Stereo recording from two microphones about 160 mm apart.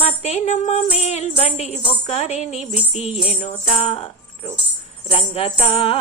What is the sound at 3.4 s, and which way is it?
Music, 40° left (ahead or behind).